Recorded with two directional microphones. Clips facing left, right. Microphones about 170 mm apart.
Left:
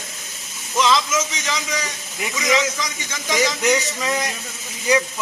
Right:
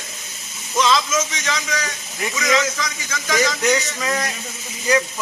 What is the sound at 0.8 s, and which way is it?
Speech, 20° left (ahead or behind).